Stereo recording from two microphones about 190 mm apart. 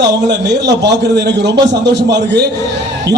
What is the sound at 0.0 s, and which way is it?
A man's voice, 65° right (ahead or behind).